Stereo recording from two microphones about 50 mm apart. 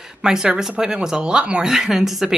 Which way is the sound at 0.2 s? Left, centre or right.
Centre.